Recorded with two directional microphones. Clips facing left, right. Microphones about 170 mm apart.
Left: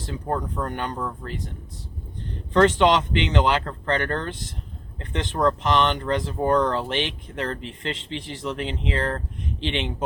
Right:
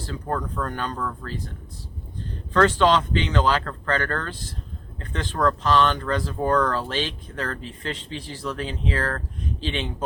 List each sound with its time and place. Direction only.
0.0 s speech: 20° left (ahead or behind)
2.5 s speech: 20° left (ahead or behind)